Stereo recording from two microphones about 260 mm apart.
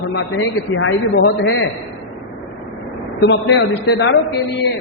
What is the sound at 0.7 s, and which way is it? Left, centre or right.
Speech, left.